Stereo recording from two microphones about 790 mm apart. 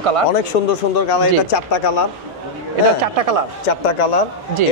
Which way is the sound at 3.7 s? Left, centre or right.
Left.